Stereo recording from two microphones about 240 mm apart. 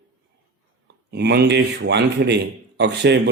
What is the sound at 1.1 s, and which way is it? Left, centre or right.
A man's voice, right.